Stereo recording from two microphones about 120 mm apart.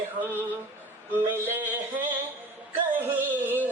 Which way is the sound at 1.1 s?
15° right (ahead or behind).